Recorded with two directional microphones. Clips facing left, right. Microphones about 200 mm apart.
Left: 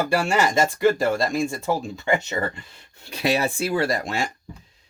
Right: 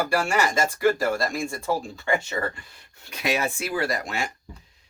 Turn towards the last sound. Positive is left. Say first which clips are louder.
# left 3 dB
turn(degrees=30)  # may be behind; listen again after turning